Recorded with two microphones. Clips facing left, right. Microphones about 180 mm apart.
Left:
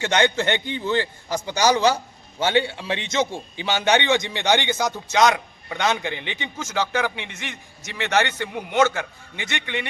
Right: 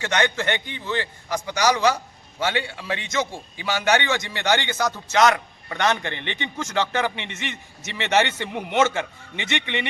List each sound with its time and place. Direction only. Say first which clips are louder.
0.0 s a man's voice: left 3 dB; 25° left (ahead or behind); by 9.8 s 5° left (ahead or behind)